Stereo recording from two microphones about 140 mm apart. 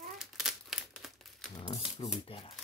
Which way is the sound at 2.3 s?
40° left (ahead or behind).